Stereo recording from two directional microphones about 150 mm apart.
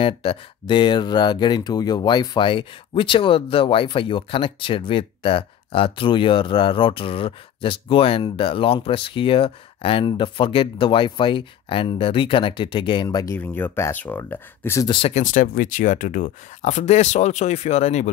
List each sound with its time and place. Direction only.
0.0 s speech: 35° left (ahead or behind); by 14.9 s 15° left (ahead or behind)
14.9 s speech: 35° left (ahead or behind)
15.1 s speech: 65° left (ahead or behind); by 18.1 s 45° left (ahead or behind)